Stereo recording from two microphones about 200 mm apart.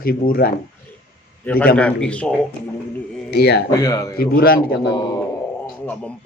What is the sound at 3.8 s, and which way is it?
Speech, 15° left (ahead or behind).